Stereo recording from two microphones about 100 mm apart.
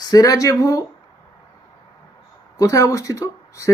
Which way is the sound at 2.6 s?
35° left (ahead or behind).